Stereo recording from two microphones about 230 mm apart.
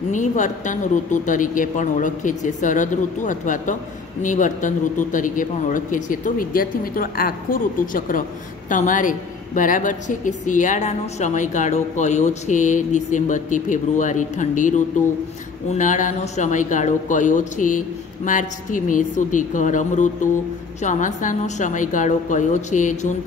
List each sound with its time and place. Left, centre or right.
0.1 s a woman's voice: left